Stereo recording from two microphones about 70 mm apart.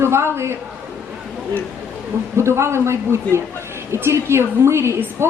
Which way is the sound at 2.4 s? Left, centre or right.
Right.